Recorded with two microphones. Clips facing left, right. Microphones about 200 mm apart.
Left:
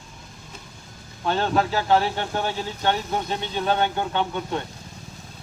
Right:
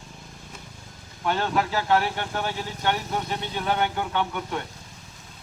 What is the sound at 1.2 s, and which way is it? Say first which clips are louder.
Speech: left 2 dB; 30° left (ahead or behind).